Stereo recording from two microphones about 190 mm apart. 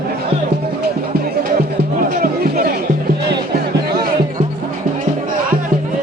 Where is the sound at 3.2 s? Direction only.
55° right (ahead or behind).